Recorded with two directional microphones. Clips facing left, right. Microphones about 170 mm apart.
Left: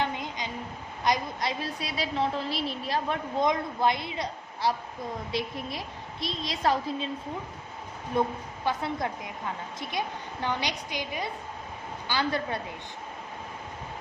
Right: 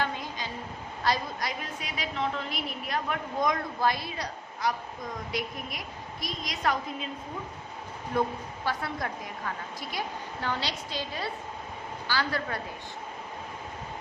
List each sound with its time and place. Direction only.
0.0 s a sound: 20° left (ahead or behind)
1.0 s a woman's voice: 20° left (ahead or behind)
8.1 s a woman's voice: 25° left (ahead or behind)